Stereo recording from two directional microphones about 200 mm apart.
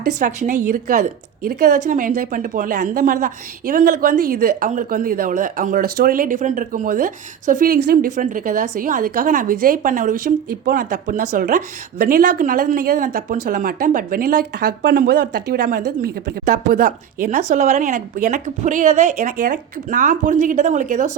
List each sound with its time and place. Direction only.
0.0 s a woman's voice: 40° right (ahead or behind)